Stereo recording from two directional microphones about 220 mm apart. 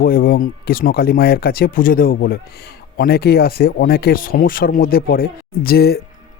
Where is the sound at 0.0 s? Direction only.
40° left (ahead or behind).